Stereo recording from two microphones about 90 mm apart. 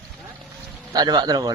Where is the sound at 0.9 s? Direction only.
50° right (ahead or behind).